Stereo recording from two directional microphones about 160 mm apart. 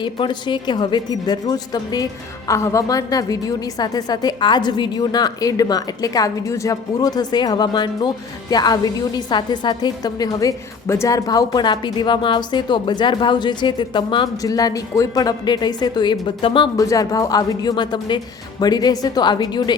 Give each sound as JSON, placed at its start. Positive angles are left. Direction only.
{"t": 0.0, "sound": "a woman's voice", "side_deg": 30}
{"t": 16.7, "sound": "a woman's voice", "side_deg": 20}